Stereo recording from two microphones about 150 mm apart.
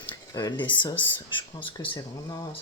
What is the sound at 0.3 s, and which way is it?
A woman's voice, 30° left (ahead or behind).